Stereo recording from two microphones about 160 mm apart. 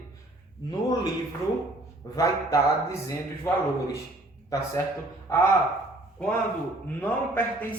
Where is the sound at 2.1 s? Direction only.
20° left (ahead or behind).